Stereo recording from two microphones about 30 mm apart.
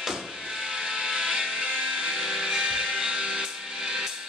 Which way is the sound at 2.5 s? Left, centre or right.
Right.